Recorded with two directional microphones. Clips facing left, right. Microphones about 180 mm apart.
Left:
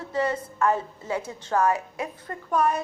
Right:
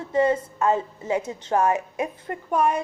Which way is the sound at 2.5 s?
10° right (ahead or behind).